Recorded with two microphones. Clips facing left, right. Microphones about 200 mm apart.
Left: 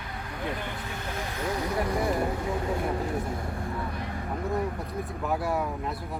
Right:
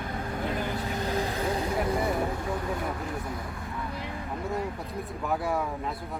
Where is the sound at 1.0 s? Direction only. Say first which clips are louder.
Right 3 dB; 35° right (ahead or behind).